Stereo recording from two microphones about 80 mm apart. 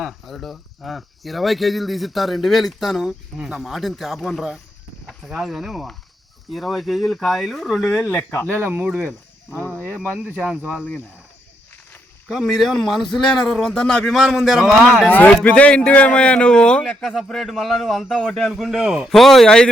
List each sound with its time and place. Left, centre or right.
0.0 s speech: centre
7.9 s speech: left
8.4 s speech: right
9.6 s speech: centre
10.1 s speech: centre
12.3 s speech: centre
15.0 s a man's voice: centre
18.8 s speech: centre
19.0 s speech: centre